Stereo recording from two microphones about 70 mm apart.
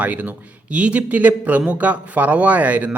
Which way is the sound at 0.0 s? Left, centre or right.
Right.